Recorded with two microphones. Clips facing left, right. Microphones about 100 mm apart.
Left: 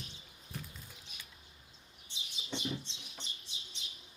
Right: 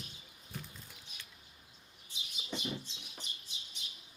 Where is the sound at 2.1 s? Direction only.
30° left (ahead or behind).